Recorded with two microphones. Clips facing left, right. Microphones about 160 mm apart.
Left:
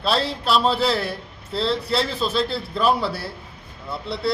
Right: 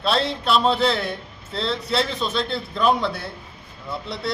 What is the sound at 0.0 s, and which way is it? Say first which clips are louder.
A man's voice: even; centre (ahead or behind).